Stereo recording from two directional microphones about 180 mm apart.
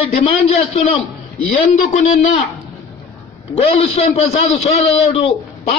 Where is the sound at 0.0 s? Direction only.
35° left (ahead or behind).